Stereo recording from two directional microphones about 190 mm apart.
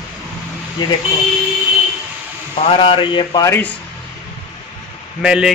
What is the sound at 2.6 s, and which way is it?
Speech, 30° left (ahead or behind).